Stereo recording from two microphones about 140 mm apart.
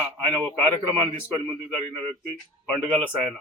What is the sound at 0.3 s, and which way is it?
Speech, 10° left (ahead or behind).